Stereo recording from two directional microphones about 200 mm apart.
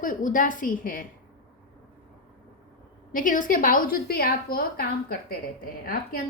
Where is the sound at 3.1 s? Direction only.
40° left (ahead or behind).